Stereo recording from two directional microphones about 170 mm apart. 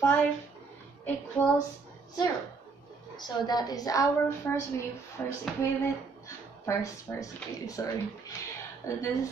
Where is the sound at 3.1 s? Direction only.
25° left (ahead or behind).